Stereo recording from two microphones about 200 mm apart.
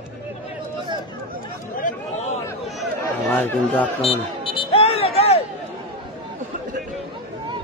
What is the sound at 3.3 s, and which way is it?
Speech, 10° left (ahead or behind).